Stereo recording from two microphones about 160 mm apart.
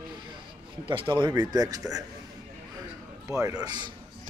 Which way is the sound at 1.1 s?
30° right (ahead or behind).